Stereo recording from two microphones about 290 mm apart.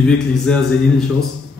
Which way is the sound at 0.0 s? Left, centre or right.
Centre.